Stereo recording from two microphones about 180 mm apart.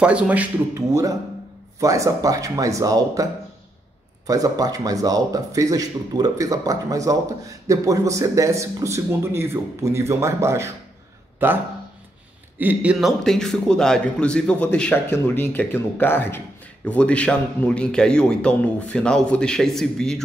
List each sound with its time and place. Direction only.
0.0 s a man's voice: 5° right (ahead or behind)
4.3 s a man's voice: 20° right (ahead or behind); by 20.2 s 5° left (ahead or behind)